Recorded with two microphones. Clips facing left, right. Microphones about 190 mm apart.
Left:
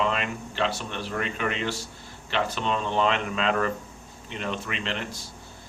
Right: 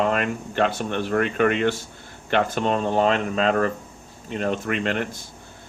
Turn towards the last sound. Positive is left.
turn(degrees=-50)  # may be behind; listen again after turning